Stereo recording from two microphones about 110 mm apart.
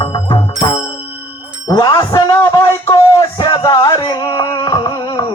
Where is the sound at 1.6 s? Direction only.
30° left (ahead or behind).